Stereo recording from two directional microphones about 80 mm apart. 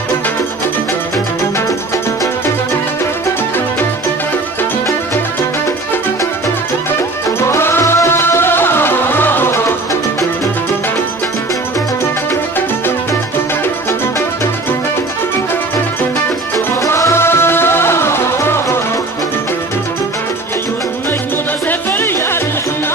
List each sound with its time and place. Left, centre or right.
7.3 s music: left
16.5 s music: left
21.6 s music: left